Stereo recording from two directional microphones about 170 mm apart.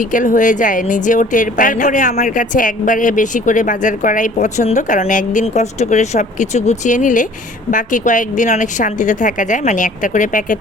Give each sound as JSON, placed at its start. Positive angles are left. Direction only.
{"t": 0.0, "sound": "speech", "side_deg": 50}